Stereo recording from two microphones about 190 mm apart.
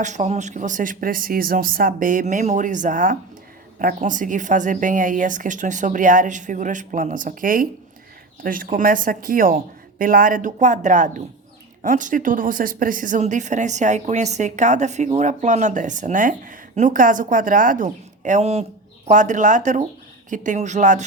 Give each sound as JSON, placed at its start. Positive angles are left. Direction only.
{"t": 0.0, "sound": "a woman's voice", "side_deg": -40}